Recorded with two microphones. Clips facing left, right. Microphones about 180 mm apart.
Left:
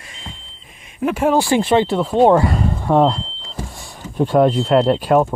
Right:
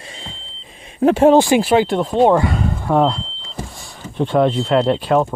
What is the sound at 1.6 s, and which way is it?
Speech, 5° right (ahead or behind).